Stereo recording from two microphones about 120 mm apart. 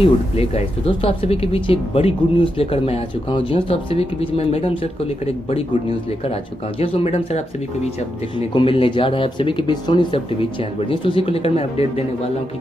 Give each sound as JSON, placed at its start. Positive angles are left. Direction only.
{"t": 0.0, "sound": "speech", "side_deg": 55}
{"t": 8.4, "sound": "speech", "side_deg": 50}